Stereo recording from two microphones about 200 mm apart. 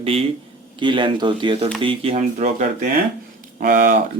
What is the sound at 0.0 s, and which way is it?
A man's voice, 30° right (ahead or behind).